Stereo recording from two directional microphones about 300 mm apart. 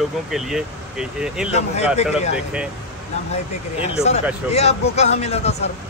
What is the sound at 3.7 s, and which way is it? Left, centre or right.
A man's voice, left.